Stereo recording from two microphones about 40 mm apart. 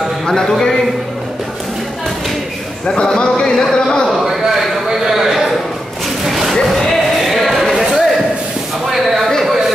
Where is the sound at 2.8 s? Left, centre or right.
Centre.